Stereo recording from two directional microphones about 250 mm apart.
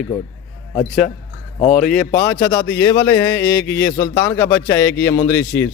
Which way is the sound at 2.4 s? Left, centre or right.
Centre.